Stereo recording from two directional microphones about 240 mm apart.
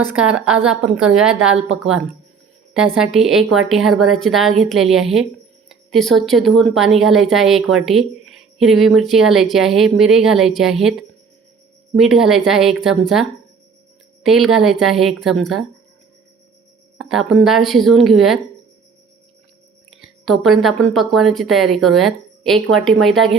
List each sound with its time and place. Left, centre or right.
0.2 s speech: centre
2.7 s speech: centre
14.3 s speech: centre
17.0 s speech: centre
19.9 s speech: centre